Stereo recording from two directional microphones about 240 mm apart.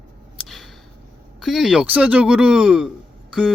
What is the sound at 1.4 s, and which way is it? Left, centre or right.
A man's voice, centre.